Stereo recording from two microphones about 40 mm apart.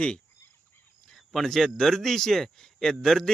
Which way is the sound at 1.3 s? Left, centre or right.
Centre.